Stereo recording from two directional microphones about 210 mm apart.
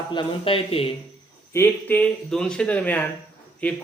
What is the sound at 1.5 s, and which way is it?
Speech, 10° left (ahead or behind).